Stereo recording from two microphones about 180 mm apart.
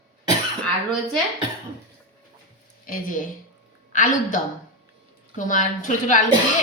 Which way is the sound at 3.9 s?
45° left (ahead or behind).